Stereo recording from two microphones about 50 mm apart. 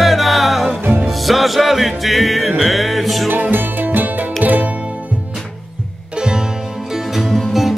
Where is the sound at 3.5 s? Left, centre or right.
Right.